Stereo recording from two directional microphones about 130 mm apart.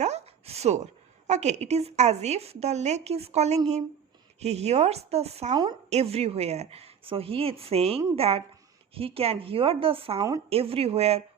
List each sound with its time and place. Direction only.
0.0 s a sound: 55° right (ahead or behind)
1.3 s a woman's voice: 60° right (ahead or behind); by 10.2 s 45° right (ahead or behind)
10.2 s a woman's voice: 25° right (ahead or behind)
10.5 s speech: 50° right (ahead or behind)